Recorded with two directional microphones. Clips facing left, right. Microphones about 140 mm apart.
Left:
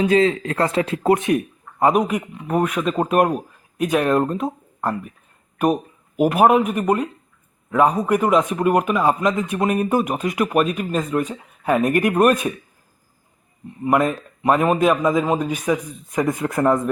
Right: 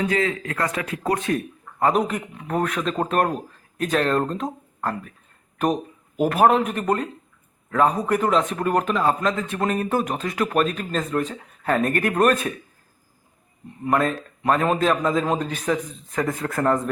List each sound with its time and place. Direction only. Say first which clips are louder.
0.0 s a man's voice: left 6 dB; 25° left (ahead or behind)
13.8 s a man's voice: left 3 dB; 15° left (ahead or behind)